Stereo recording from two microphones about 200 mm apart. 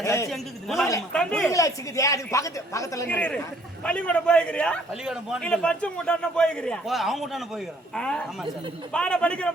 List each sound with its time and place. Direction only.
0.0 s a man's voice: 15° left (ahead or behind)
0.3 s a man's voice: centre (ahead or behind)
1.5 s a man's voice: 15° left (ahead or behind)